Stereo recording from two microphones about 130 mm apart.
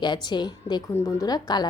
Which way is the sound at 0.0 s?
35° left (ahead or behind).